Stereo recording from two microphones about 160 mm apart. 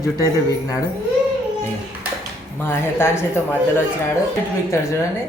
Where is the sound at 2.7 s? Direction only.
15° left (ahead or behind).